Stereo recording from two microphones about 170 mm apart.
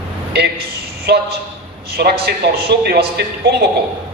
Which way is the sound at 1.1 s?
75° right (ahead or behind).